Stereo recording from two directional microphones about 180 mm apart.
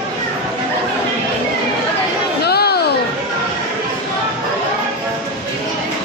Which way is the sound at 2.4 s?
60° left (ahead or behind).